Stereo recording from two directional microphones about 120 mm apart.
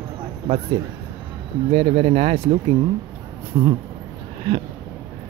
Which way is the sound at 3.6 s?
40° right (ahead or behind).